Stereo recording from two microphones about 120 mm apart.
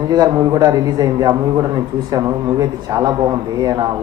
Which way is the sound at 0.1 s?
35° right (ahead or behind).